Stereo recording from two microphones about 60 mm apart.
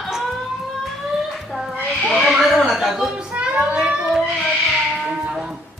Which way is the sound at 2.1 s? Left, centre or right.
Centre.